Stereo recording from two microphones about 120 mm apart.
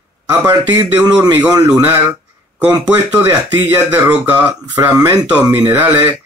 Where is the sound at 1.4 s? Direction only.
30° right (ahead or behind).